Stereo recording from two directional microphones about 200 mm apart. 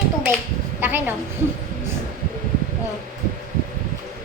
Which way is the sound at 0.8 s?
10° right (ahead or behind).